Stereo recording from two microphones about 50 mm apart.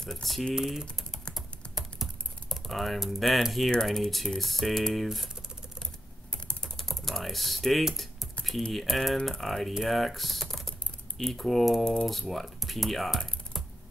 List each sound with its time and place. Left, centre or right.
0.0 s speech: centre
0.6 s speech: centre
1.3 s typing: centre
2.5 s speech: centre
3.8 s speech: centre
6.3 s typing: centre
8.7 s speech: centre
11.8 s speech: centre
12.1 s speech: centre